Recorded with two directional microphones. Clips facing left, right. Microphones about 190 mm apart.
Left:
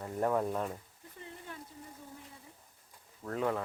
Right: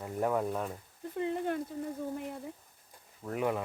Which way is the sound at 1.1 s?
75° right (ahead or behind).